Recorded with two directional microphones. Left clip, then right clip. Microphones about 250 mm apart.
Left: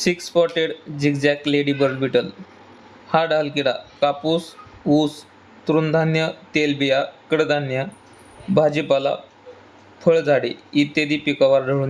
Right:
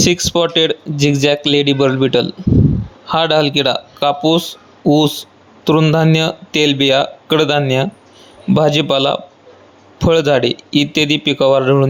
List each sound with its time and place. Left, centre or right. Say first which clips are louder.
0.0 s speech: right 5 dB; right